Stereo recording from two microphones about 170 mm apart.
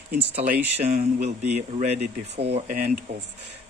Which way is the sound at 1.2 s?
40° right (ahead or behind).